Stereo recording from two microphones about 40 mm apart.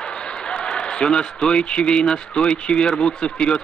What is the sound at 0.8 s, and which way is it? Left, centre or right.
A man's voice, left.